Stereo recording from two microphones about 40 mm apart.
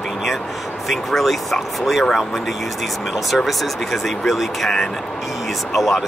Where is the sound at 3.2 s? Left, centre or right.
Centre.